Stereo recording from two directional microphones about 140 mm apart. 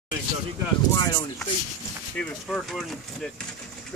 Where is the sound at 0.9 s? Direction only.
30° left (ahead or behind).